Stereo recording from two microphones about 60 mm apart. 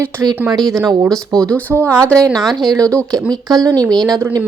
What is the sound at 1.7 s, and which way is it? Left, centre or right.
Speech, right.